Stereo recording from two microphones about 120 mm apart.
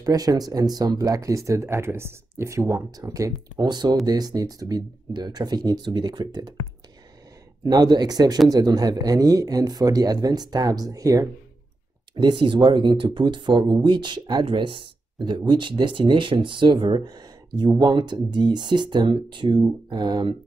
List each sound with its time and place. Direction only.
0.0 s speech: 30° right (ahead or behind)
7.6 s speech: 30° right (ahead or behind)
12.2 s speech: 40° right (ahead or behind)